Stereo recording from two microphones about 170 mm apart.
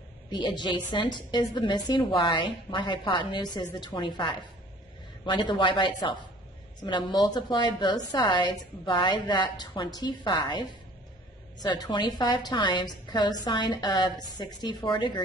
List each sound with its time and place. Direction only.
0.3 s a woman's voice: 25° left (ahead or behind)
11.6 s a woman's voice: 25° left (ahead or behind)